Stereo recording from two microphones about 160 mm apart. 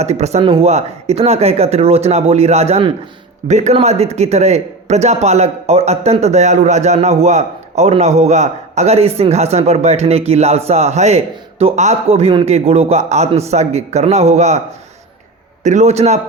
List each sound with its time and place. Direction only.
0.0 s a man's voice: 45° right (ahead or behind)
15.6 s a man's voice: 45° right (ahead or behind)